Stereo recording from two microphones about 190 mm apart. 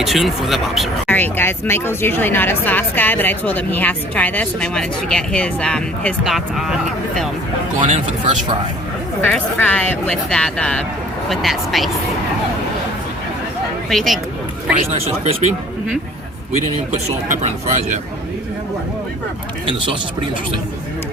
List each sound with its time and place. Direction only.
0.0 s speech: centre (ahead or behind)
7.8 s speech: 35° right (ahead or behind)
9.2 s speech: 10° left (ahead or behind)
13.9 s speech: centre (ahead or behind)
14.8 s speech: 30° right (ahead or behind)
16.5 s speech: 40° right (ahead or behind)
19.6 s speech: 25° right (ahead or behind)